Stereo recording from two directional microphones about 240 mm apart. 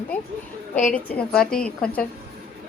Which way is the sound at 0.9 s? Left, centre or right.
Centre.